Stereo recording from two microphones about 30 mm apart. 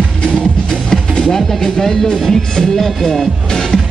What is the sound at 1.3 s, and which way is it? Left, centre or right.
Music, centre.